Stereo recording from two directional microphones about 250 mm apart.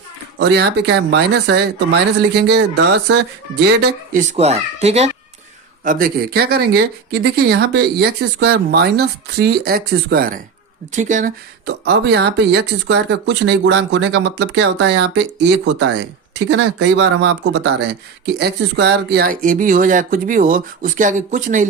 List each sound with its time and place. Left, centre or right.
0.3 s speech: right